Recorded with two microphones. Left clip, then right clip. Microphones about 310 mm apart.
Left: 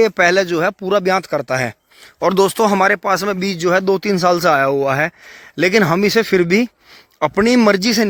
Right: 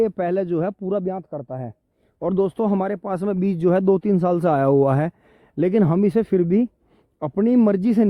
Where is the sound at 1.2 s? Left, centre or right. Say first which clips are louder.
Left 13 dB; left.